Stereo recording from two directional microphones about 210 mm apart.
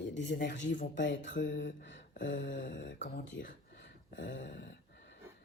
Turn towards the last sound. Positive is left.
turn(degrees=40)  # may be behind; listen again after turning